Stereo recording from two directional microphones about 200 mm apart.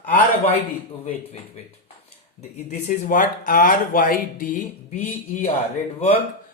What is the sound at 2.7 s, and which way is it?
Speech, 35° left (ahead or behind).